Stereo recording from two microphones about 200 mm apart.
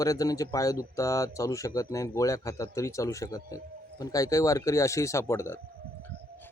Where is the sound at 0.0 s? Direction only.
15° left (ahead or behind).